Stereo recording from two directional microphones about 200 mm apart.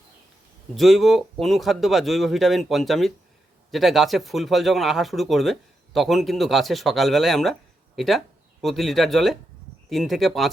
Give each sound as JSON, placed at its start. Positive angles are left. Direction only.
{"t": 0.8, "sound": "speech", "side_deg": 0}